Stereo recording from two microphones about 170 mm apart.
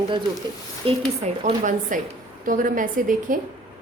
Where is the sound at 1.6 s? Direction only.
50° right (ahead or behind).